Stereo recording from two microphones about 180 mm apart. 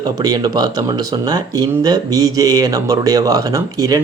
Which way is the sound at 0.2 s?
20° right (ahead or behind).